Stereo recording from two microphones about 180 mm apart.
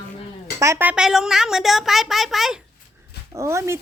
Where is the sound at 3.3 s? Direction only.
15° right (ahead or behind).